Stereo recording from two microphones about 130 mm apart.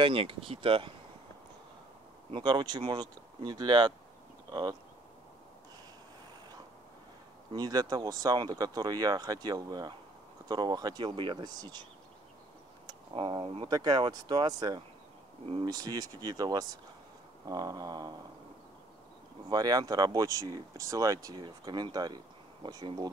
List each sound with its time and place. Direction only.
0.0 s speech: 45° right (ahead or behind)
2.3 s speech: 35° right (ahead or behind)
7.5 s speech: 30° right (ahead or behind)
13.1 s speech: 40° right (ahead or behind)
19.5 s speech: 30° right (ahead or behind)